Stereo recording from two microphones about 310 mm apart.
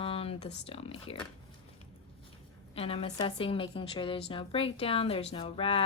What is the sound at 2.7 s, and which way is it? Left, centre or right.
A woman's voice, centre.